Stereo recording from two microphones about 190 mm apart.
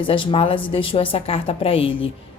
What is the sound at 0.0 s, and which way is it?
Speech, 25° left (ahead or behind).